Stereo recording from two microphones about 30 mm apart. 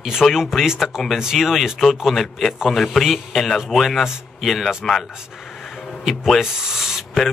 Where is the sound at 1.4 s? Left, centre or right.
Centre.